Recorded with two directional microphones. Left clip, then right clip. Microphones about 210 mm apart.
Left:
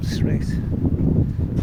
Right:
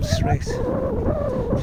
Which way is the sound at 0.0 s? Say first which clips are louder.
Right 3 dB; 20° right (ahead or behind).